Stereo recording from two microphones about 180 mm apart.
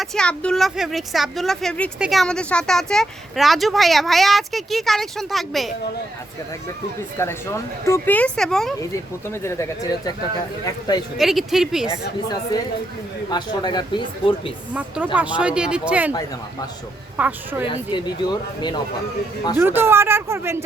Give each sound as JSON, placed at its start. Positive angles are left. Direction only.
{"t": 0.0, "sound": "speech", "side_deg": 5}
{"t": 7.2, "sound": "speech", "side_deg": 15}
{"t": 9.3, "sound": "speech", "side_deg": 15}
{"t": 11.2, "sound": "speech", "side_deg": 0}
{"t": 12.3, "sound": "speech", "side_deg": 20}
{"t": 14.7, "sound": "speech", "side_deg": -10}
{"t": 17.2, "sound": "speech", "side_deg": -10}
{"t": 17.7, "sound": "speech", "side_deg": 25}
{"t": 19.5, "sound": "speech", "side_deg": -10}